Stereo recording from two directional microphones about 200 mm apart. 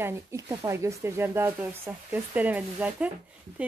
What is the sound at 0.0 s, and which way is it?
Speech, 15° right (ahead or behind).